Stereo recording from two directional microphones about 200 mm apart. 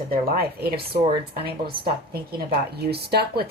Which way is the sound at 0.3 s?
50° right (ahead or behind).